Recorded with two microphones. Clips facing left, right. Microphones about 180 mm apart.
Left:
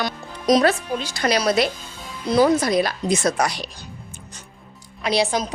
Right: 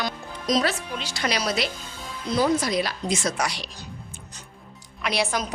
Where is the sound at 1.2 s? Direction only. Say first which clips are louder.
Left 6 dB; 45° left (ahead or behind).